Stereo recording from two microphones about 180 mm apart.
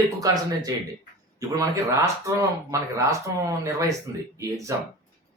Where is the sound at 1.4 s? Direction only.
20° right (ahead or behind).